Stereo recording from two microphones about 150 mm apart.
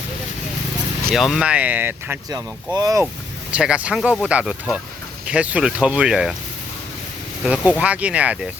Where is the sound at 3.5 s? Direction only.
5° right (ahead or behind).